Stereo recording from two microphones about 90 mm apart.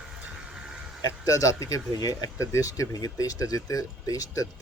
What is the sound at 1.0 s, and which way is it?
Speech, 40° left (ahead or behind).